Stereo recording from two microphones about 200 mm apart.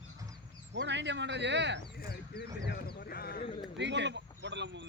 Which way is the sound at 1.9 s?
50° left (ahead or behind).